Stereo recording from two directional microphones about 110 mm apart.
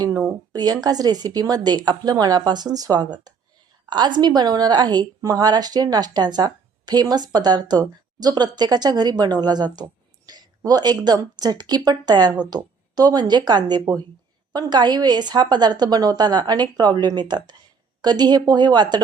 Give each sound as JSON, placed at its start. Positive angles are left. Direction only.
{"t": 0.5, "sound": "a woman's voice", "side_deg": -40}